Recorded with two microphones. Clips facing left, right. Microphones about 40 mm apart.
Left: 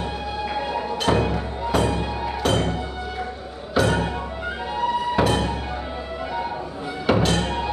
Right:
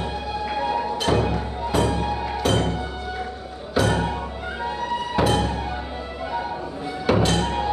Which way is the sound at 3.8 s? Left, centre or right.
Centre.